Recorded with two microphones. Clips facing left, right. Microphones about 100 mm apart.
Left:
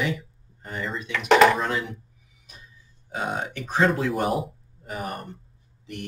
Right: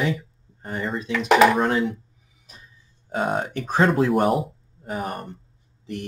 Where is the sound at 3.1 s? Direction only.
45° right (ahead or behind).